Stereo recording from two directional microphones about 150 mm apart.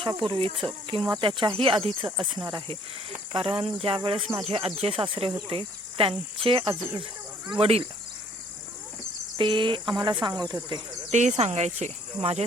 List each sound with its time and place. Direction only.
0.0 s speech: 35° right (ahead or behind)
9.4 s speech: 35° right (ahead or behind)
11.1 s speech: 50° right (ahead or behind)